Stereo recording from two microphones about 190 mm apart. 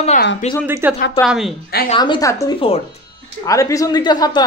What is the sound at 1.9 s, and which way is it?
Speech, 25° left (ahead or behind).